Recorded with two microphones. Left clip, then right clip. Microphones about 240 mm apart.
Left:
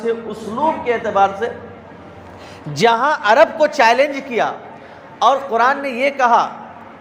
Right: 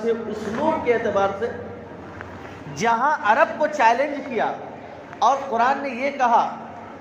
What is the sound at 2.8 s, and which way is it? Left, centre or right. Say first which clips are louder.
A man's voice: left 6 dB; left.